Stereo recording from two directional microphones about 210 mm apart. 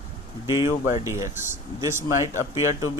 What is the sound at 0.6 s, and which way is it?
Speech, 15° right (ahead or behind).